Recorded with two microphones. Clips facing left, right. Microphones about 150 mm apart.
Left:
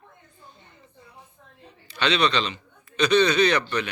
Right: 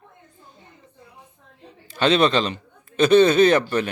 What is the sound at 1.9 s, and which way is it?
A man's voice, 45° right (ahead or behind).